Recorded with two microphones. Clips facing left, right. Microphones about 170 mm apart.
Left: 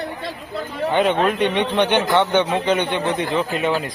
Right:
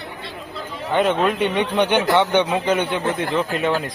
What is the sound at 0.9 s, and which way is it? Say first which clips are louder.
A man's voice: even; centre (ahead or behind).